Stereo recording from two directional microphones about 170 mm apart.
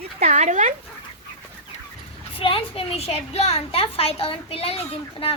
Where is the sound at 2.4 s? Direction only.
35° left (ahead or behind).